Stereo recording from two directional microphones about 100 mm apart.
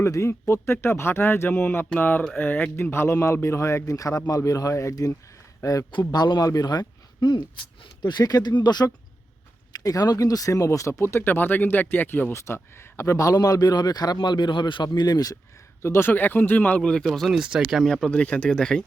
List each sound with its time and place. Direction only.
0.0 s speech: 30° left (ahead or behind)
5.9 s speech: 45° left (ahead or behind)
15.8 s speech: 25° left (ahead or behind); by 17.4 s centre (ahead or behind)
17.4 s speech: 10° right (ahead or behind); by 18.8 s 5° left (ahead or behind)